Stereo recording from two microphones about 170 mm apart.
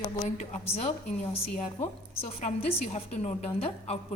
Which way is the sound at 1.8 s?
40° left (ahead or behind).